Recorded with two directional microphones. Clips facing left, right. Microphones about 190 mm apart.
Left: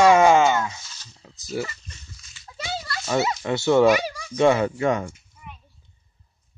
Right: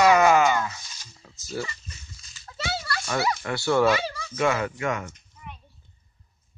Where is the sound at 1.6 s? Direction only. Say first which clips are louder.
Left 3 dB; 15° left (ahead or behind).